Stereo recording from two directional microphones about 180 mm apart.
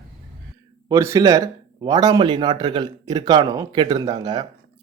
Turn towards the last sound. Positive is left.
turn(degrees=-25)  # may be behind; listen again after turning